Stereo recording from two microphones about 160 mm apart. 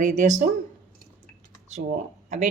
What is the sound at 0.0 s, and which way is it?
Speech, 50° right (ahead or behind).